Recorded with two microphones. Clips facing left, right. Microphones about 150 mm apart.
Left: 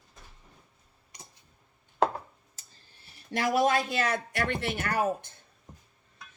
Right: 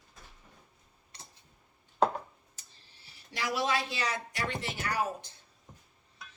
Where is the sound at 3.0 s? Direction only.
55° left (ahead or behind).